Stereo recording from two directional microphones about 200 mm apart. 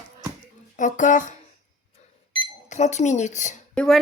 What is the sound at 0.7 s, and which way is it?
Speech, 40° left (ahead or behind).